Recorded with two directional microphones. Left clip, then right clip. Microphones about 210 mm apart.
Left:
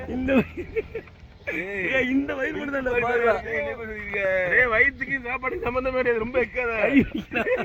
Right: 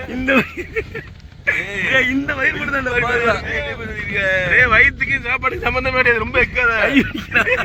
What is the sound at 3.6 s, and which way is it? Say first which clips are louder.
Speech: right 6 dB; 45° right (ahead or behind).